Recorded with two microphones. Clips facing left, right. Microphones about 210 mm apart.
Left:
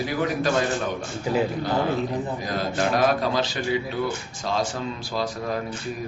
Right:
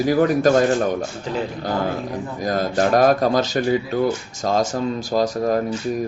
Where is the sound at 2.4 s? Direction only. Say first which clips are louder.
Right 10 dB; 45° right (ahead or behind).